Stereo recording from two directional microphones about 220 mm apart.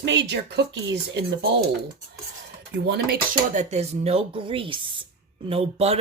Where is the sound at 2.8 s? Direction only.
50° right (ahead or behind).